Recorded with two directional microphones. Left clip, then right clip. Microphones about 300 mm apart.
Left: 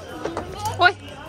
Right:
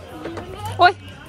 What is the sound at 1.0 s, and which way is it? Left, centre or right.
Music, left.